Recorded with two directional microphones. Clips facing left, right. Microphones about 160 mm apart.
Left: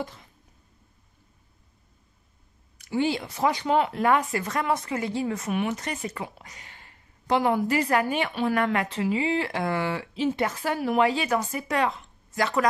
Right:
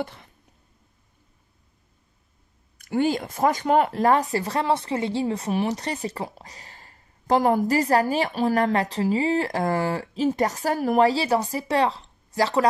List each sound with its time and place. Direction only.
0.0 s a sound: 65° right (ahead or behind)
2.8 s speech: 50° right (ahead or behind)
4.0 s speech: 35° right (ahead or behind)